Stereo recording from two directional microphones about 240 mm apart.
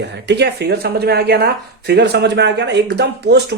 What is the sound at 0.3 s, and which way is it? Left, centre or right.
Speech, right.